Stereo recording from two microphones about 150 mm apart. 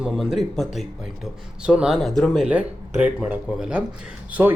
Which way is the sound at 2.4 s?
10° right (ahead or behind).